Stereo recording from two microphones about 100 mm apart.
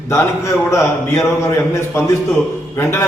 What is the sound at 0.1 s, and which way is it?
A man's voice, 25° left (ahead or behind).